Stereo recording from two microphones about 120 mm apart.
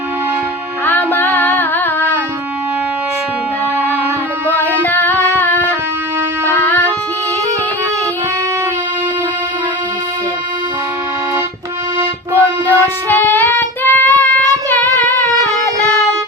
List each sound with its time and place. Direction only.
0.9 s music: 15° left (ahead or behind)
4.8 s singing: 15° left (ahead or behind)
5.4 s music: 15° left (ahead or behind)
6.6 s a sound: 15° left (ahead or behind)
11.9 s music: 20° right (ahead or behind)
13.1 s child singing: 15° left (ahead or behind)